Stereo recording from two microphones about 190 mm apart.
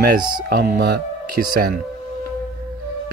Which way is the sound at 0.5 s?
50° right (ahead or behind).